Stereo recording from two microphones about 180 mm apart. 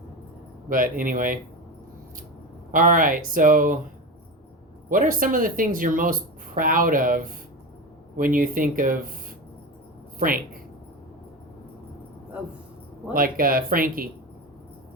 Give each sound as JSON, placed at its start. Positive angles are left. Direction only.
{"t": 0.7, "sound": "speech", "side_deg": -50}
{"t": 2.7, "sound": "speech", "side_deg": -50}
{"t": 4.9, "sound": "speech", "side_deg": -50}
{"t": 10.2, "sound": "speech", "side_deg": -50}
{"t": 13.1, "sound": "speech", "side_deg": -50}